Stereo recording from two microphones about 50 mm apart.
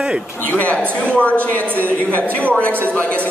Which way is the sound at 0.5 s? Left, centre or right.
Left.